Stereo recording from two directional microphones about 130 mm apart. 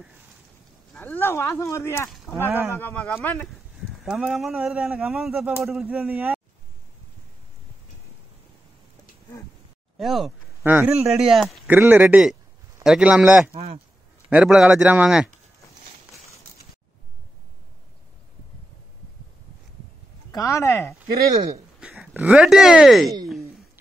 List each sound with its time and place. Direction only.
0.9 s speech: 20° left (ahead or behind)
2.0 s a sound: centre (ahead or behind)
2.3 s speech: 15° right (ahead or behind)
4.0 s speech: centre (ahead or behind)
5.9 s speech: 10° right (ahead or behind)
9.9 s speech: centre (ahead or behind)
10.6 s speech: 15° right (ahead or behind)
11.1 s speech: 5° right (ahead or behind)
11.6 s speech: 15° right (ahead or behind)
13.5 s speech: 50° right (ahead or behind)
14.3 s speech: 5° right (ahead or behind)
20.2 s speech: 25° left (ahead or behind)
21.2 s speech: 25° right (ahead or behind)
21.7 s speech: 5° right (ahead or behind)